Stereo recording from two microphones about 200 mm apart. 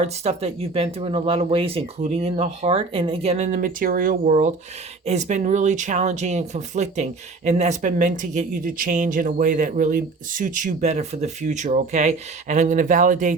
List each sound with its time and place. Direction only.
0.0 s speech: 30° right (ahead or behind)